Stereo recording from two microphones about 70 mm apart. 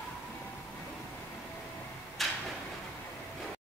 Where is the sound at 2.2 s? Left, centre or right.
Centre.